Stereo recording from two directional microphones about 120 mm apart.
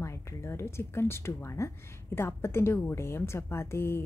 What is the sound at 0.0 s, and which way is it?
A woman's voice, 25° left (ahead or behind).